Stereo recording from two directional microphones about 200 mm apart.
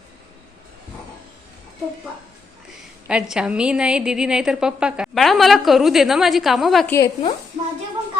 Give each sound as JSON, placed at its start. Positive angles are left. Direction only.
{"t": 3.1, "sound": "a woman's voice", "side_deg": -5}
{"t": 6.9, "sound": "a woman's voice", "side_deg": 20}